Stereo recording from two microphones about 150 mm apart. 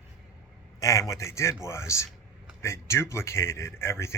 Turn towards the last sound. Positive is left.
turn(degrees=20)  # may be behind; listen again after turning